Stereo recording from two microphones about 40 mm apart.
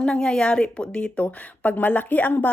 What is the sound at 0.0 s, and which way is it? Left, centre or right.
A woman's voice, left.